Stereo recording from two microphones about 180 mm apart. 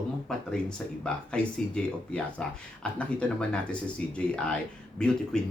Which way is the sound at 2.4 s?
5° left (ahead or behind).